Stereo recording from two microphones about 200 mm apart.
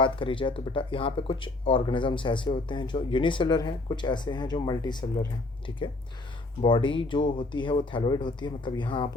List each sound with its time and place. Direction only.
0.0 s speech: 25° left (ahead or behind)